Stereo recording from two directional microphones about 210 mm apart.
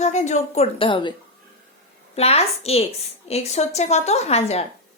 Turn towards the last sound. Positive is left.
turn(degrees=30)  # may be behind; listen again after turning